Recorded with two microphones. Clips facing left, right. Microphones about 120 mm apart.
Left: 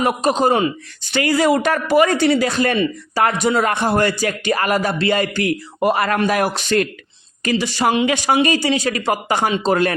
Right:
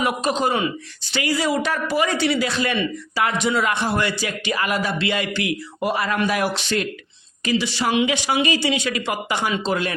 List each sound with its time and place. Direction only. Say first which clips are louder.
0.0 s speech: left 4 dB; 40° left (ahead or behind)
1.1 s a man's voice: left 6 dB; 55° left (ahead or behind)
6.1 s a man's voice: left 3 dB; 45° left (ahead or behind)